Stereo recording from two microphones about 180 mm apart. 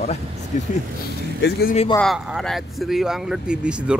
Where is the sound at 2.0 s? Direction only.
Centre (ahead or behind).